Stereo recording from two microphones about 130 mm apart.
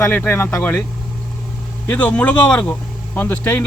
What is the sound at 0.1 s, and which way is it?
Speech, 15° left (ahead or behind).